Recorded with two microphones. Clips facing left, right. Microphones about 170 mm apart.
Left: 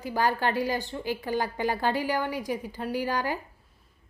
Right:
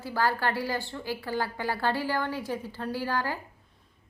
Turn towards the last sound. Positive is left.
turn(degrees=15)  # may be behind; listen again after turning